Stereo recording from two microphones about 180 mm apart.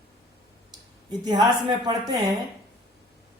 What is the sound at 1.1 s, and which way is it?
Speech, 20° right (ahead or behind).